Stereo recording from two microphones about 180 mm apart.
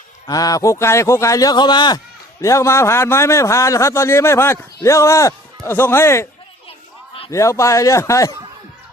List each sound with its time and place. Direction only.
0.3 s a man's voice: 20° left (ahead or behind)
6.7 s a sound: 30° left (ahead or behind)
7.3 s a man's voice: 15° left (ahead or behind)